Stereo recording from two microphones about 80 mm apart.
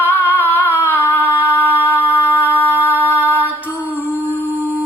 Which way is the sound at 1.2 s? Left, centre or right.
Right.